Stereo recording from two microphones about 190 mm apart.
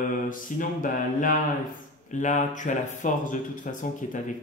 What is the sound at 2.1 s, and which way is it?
Speech, 40° left (ahead or behind).